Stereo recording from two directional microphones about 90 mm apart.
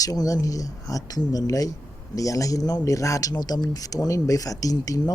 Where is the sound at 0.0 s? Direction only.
40° left (ahead or behind).